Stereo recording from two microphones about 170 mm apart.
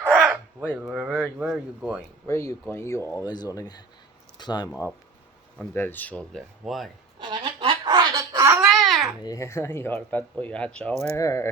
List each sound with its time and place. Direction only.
0.1 s a sound: 5° right (ahead or behind)
0.8 s speech: 5° right (ahead or behind)
2.2 s speech: 15° left (ahead or behind)
5.5 s speech: 10° left (ahead or behind)
7.2 s a sound: 25° right (ahead or behind)
8.6 s babbling: centre (ahead or behind)
9.2 s speech: 20° left (ahead or behind)
11.2 s speech: 20° left (ahead or behind)